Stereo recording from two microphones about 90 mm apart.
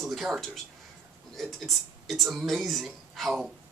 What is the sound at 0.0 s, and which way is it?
Speech, centre (ahead or behind).